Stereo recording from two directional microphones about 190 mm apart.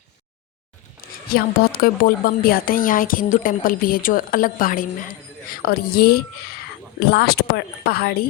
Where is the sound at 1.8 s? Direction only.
50° left (ahead or behind).